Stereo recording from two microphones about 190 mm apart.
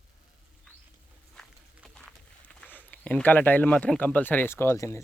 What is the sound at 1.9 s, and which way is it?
Speech, 5° left (ahead or behind).